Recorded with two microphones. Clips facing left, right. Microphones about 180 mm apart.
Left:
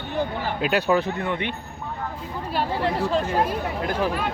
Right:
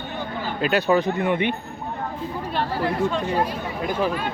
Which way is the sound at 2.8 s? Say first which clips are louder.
Right 1 dB; 35° left (ahead or behind).